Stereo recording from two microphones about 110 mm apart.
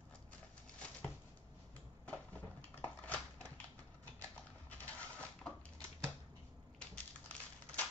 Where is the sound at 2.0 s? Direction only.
10° left (ahead or behind).